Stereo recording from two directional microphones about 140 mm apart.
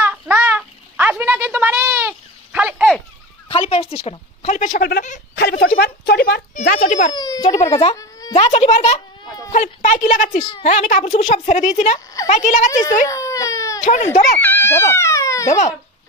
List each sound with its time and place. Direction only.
0.0 s a sound: 10° right (ahead or behind)
3.4 s a woman's voice: 40° left (ahead or behind); by 7.1 s 70° left (ahead or behind)
7.1 s a child's voice: 30° left (ahead or behind)
7.4 s speech: 55° left (ahead or behind)
7.9 s a sound: 25° left (ahead or behind)
8.4 s a woman's voice: 45° left (ahead or behind)
13.0 s baby cry: 25° left (ahead or behind)
13.8 s a woman's voice: 60° left (ahead or behind)
14.4 s speech: 15° left (ahead or behind)